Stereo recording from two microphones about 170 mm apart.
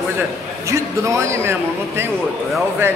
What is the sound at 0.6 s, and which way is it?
Speech, 15° right (ahead or behind).